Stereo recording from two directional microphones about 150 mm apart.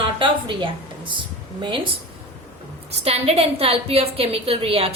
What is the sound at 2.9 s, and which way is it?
A woman's voice, 45° right (ahead or behind).